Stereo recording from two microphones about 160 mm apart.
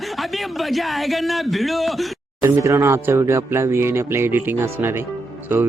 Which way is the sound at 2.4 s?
20° right (ahead or behind).